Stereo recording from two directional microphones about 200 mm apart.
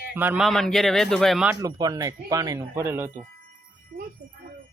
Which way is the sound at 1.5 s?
20° right (ahead or behind).